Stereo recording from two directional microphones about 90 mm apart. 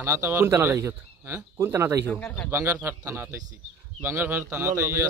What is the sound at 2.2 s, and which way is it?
Speech, 15° left (ahead or behind).